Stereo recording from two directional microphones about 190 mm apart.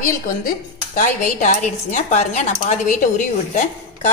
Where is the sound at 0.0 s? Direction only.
45° left (ahead or behind).